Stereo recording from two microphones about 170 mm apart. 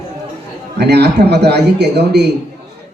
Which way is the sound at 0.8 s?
75° right (ahead or behind).